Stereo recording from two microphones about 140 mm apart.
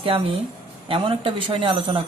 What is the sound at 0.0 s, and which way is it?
Speech, 40° right (ahead or behind).